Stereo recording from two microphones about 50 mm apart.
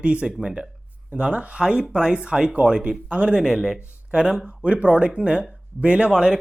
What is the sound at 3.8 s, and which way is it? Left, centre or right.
Speech, right.